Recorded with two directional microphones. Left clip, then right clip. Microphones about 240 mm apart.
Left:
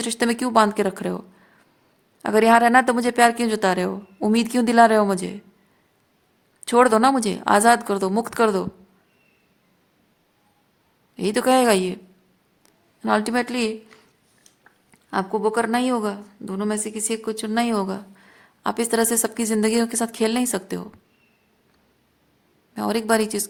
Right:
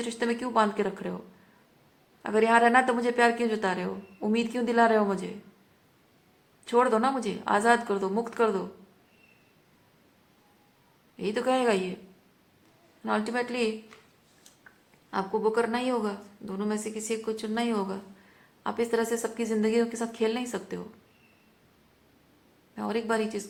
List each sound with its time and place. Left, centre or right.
0.0 s a woman's voice: left
2.2 s a woman's voice: left
6.7 s a woman's voice: left
11.2 s a woman's voice: left
13.0 s a woman's voice: left
15.1 s a woman's voice: left
22.7 s a woman's voice: left